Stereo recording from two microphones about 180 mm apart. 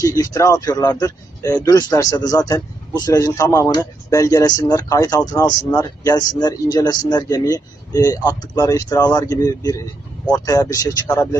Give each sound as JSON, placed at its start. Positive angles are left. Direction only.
{"t": 0.0, "sound": "speech", "side_deg": 15}